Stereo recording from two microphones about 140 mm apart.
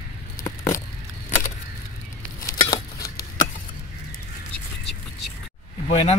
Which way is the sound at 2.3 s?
25° left (ahead or behind).